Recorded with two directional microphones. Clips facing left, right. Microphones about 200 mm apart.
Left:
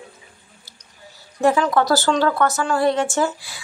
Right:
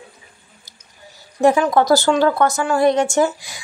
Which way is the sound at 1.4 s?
15° right (ahead or behind).